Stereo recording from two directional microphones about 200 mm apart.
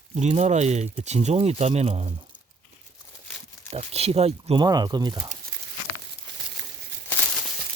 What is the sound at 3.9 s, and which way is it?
Speech, 30° right (ahead or behind).